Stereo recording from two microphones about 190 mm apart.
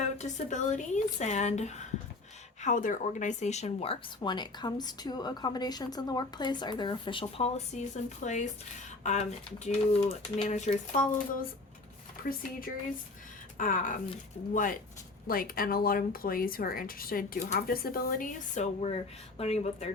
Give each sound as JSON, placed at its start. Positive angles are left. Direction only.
{"t": 0.0, "sound": "speech", "side_deg": 40}
{"t": 13.6, "sound": "speech", "side_deg": 45}